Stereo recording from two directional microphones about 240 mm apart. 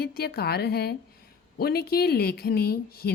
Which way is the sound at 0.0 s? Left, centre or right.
Left.